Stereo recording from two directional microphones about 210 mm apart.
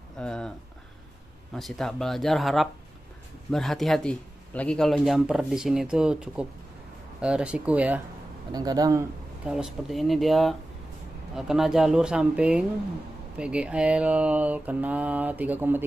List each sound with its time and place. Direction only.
0.2 s speech: 5° left (ahead or behind)
1.5 s speech: centre (ahead or behind)
8.5 s a man's voice: 20° right (ahead or behind)
9.5 s speech: centre (ahead or behind)